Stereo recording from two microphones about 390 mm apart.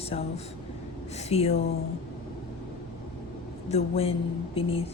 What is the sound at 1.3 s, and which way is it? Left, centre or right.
Speech, centre.